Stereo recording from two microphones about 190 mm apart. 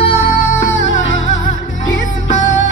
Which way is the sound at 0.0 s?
35° left (ahead or behind).